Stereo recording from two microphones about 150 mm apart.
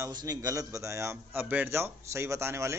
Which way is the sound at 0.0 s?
25° right (ahead or behind).